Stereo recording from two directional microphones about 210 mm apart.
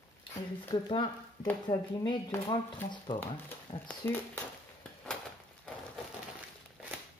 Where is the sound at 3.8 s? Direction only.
10° left (ahead or behind).